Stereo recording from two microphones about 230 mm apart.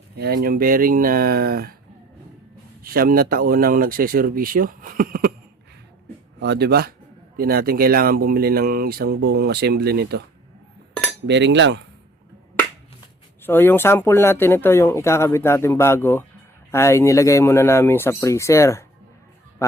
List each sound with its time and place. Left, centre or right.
0.2 s speech: right
2.8 s speech: right
6.4 s cutlery: right
7.3 s speech: right
11.3 s cutlery: right
13.4 s speech: centre